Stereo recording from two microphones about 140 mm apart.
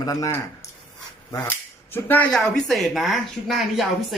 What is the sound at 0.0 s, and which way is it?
Speech, 25° left (ahead or behind).